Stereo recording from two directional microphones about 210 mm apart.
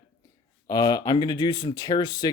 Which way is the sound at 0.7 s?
20° left (ahead or behind).